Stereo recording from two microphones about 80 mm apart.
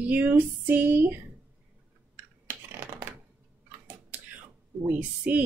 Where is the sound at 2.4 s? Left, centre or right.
Right.